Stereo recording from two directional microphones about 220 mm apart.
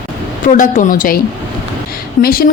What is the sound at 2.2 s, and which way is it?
Speech, 40° left (ahead or behind).